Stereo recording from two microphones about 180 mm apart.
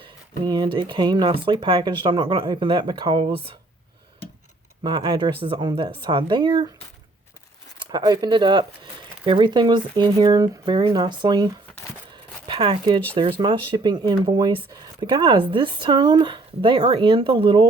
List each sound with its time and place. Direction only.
0.0 s speech: 25° right (ahead or behind)
4.8 s speech: 25° right (ahead or behind)
7.9 s speech: 20° right (ahead or behind)
12.1 s zipper: 30° right (ahead or behind)
13.1 s speech: 25° right (ahead or behind)